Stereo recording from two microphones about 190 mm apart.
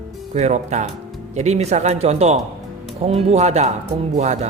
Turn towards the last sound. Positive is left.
turn(degrees=-35)  # may be behind; listen again after turning